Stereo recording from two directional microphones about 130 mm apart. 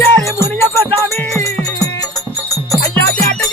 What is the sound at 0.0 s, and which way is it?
Music, 20° left (ahead or behind).